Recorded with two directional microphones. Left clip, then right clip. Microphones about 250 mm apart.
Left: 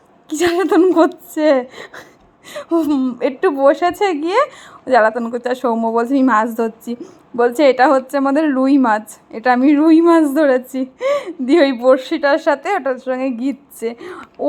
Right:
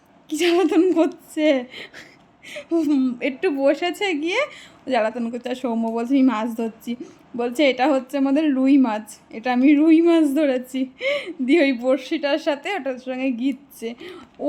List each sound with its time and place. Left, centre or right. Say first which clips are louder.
0.3 s a woman's voice: left 4 dB; centre
2.6 s a woman's voice: left 4 dB; centre